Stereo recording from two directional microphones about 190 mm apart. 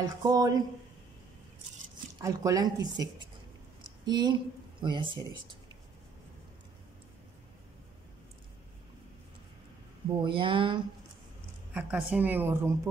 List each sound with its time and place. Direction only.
0.2 s a woman's voice: 20° right (ahead or behind)
2.2 s a woman's voice: 20° right (ahead or behind)
10.0 s a woman's voice: 25° right (ahead or behind)
11.7 s a woman's voice: 10° right (ahead or behind)